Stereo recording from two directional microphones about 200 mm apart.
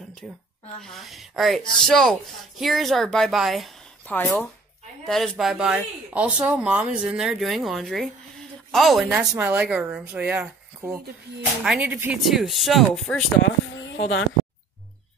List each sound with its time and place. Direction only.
0.2 s speech: 5° left (ahead or behind)
13.7 s speech: 65° left (ahead or behind)